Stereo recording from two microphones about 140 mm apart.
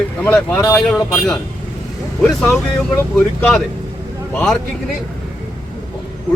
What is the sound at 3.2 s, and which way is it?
Speech, 5° left (ahead or behind).